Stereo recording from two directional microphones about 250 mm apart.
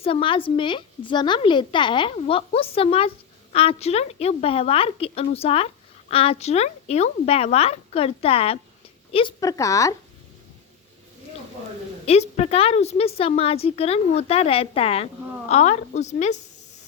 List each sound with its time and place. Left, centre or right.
0.0 s a woman's voice: left
12.0 s a woman's voice: left